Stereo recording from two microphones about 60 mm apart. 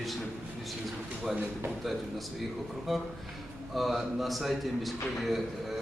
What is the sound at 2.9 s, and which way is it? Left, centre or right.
A man's voice, centre.